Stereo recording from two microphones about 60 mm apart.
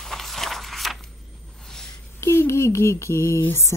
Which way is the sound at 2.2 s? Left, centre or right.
Left.